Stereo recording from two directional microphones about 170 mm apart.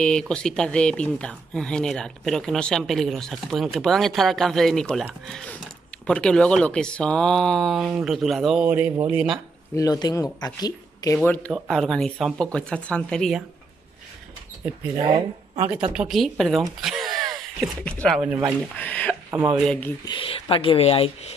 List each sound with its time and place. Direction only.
0.0 s speech: 5° left (ahead or behind)
9.8 s a man's voice: 20° left (ahead or behind)
11.2 s speech: 10° left (ahead or behind)
15.0 s speech: 30° right (ahead or behind)
15.7 s speech: 5° right (ahead or behind)
16.8 s a sound: centre (ahead or behind)
18.0 s speech: centre (ahead or behind)
20.1 s speech: 30° left (ahead or behind)